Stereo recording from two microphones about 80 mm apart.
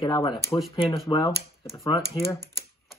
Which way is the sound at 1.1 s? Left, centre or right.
Left.